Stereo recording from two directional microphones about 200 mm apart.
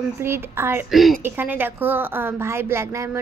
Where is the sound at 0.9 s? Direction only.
Centre (ahead or behind).